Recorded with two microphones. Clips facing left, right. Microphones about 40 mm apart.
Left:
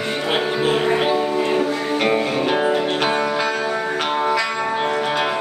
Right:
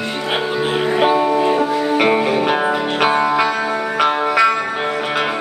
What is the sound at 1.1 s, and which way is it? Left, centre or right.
Music, right.